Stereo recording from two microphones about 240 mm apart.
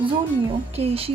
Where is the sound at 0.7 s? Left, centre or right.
Right.